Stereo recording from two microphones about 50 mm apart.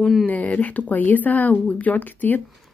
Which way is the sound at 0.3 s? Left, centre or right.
Left.